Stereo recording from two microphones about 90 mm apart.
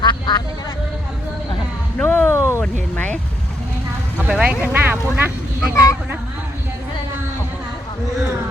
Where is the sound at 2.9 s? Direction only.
20° left (ahead or behind).